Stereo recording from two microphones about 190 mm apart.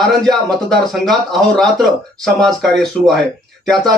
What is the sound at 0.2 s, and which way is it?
Speech, centre (ahead or behind).